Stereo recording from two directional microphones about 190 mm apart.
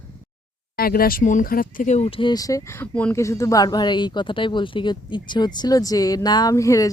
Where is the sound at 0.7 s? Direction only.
50° left (ahead or behind).